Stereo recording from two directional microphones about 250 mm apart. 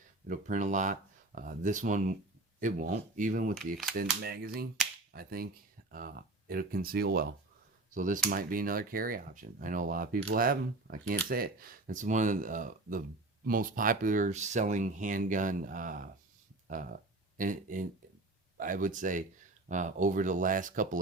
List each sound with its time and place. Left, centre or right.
0.3 s speech: right